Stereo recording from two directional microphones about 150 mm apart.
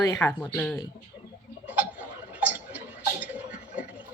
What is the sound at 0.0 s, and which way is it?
Speech, 20° left (ahead or behind).